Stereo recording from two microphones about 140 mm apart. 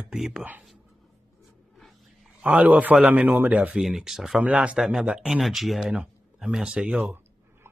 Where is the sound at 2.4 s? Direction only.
10° right (ahead or behind).